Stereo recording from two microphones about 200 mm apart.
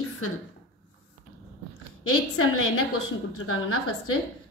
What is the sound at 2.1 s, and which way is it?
A woman's voice, 90° left.